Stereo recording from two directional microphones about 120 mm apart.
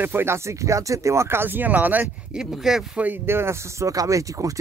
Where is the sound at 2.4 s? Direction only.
5° right (ahead or behind).